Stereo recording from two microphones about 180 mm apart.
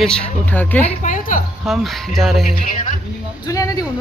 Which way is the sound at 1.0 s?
45° left (ahead or behind).